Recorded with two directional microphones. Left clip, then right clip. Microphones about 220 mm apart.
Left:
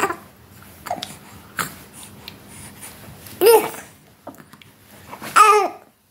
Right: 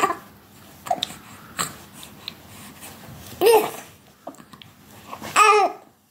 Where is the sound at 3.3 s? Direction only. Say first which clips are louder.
Left 3 dB; 15° left (ahead or behind).